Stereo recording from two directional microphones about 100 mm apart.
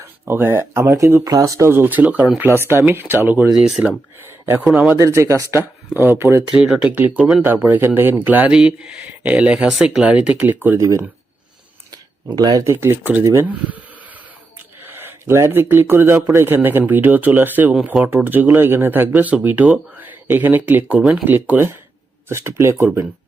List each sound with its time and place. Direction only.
0.0 s speech: 20° right (ahead or behind)
3.5 s speech: 5° right (ahead or behind)
3.8 s speech: 25° right (ahead or behind)
4.6 s speech: 5° right (ahead or behind)
5.1 s speech: 30° right (ahead or behind)
6.5 s speech: 10° right (ahead or behind)
10.8 s speech: 30° right (ahead or behind)
12.3 s speech: 40° right (ahead or behind)
12.8 s speech: 20° right (ahead or behind)
14.8 s speech: 20° right (ahead or behind); by 21.2 s 5° right (ahead or behind)
21.2 s speech: 15° right (ahead or behind)